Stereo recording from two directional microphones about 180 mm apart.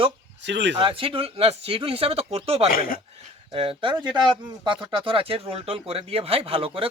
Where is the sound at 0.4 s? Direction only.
80° right.